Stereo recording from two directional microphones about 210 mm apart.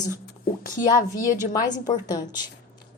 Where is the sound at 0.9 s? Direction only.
15° left (ahead or behind).